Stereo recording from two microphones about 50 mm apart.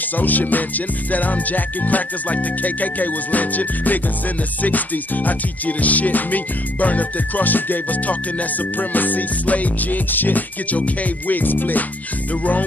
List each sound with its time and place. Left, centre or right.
0.2 s music: left